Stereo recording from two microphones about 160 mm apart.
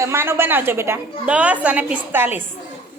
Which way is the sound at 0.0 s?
15° right (ahead or behind).